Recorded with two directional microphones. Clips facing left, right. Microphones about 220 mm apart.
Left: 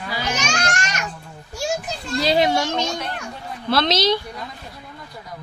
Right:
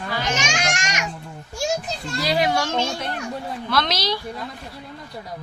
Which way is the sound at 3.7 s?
25° left (ahead or behind).